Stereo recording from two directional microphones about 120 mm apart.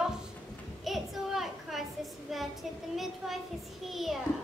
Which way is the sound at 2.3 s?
Centre (ahead or behind).